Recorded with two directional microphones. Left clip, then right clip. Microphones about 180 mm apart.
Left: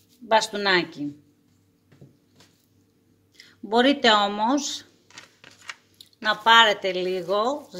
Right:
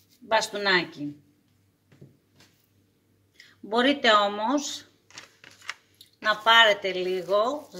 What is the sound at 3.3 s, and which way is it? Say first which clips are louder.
Speech: left 4 dB; 75° left (ahead or behind).